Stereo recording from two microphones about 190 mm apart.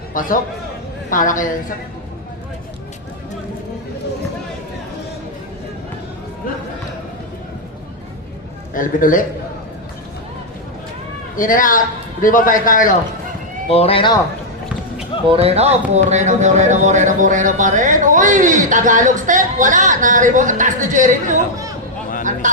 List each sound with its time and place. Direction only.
0.1 s a man's voice: 45° left (ahead or behind)
8.7 s a man's voice: 45° left (ahead or behind)
11.3 s a man's voice: 45° left (ahead or behind)
13.7 s speech: 30° left (ahead or behind)
15.3 s speech: 30° right (ahead or behind)